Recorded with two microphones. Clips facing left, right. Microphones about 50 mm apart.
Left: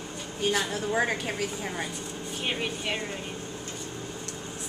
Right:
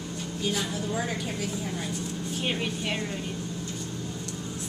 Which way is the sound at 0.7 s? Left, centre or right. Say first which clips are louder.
Left 3 dB; left.